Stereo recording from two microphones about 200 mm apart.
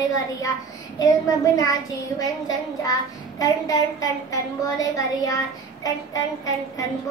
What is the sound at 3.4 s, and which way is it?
Child singing, 15° left (ahead or behind).